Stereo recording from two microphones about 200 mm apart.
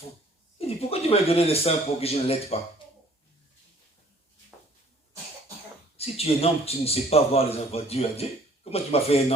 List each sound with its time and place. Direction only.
0.8 s speech: 30° left (ahead or behind)
6.0 s a man's voice: 30° left (ahead or behind)